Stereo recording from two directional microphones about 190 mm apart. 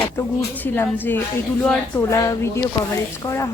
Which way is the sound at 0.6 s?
10° left (ahead or behind).